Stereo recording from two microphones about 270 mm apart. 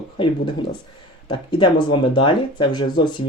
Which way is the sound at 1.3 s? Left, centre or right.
Centre.